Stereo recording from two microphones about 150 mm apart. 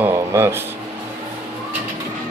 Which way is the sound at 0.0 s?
15° right (ahead or behind).